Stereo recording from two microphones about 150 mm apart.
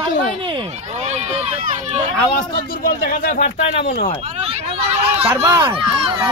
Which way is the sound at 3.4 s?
45° left (ahead or behind).